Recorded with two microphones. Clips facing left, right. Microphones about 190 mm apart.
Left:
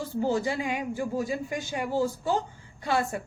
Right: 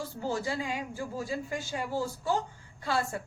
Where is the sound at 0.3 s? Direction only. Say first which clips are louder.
Left 3 dB; 20° left (ahead or behind).